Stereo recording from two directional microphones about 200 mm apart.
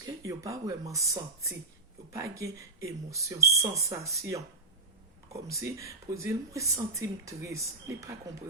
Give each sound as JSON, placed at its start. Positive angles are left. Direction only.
{"t": 0.0, "sound": "speech", "side_deg": -15}
{"t": 2.1, "sound": "speech", "side_deg": -15}